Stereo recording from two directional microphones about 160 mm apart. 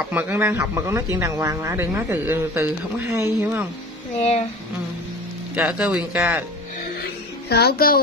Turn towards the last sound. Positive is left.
turn(degrees=70)  # may be behind; listen again after turning